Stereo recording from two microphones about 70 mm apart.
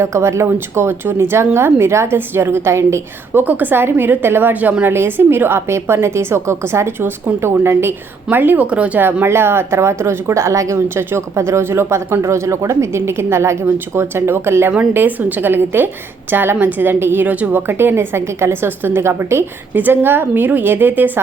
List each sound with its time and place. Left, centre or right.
0.0 s a woman's voice: right
3.4 s a woman's voice: right
8.6 s speech: centre
9.2 s a woman's voice: right
10.8 s a woman's voice: right
14.7 s a woman's voice: right